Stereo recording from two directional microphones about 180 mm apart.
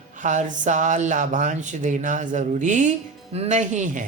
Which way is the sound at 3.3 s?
40° right (ahead or behind).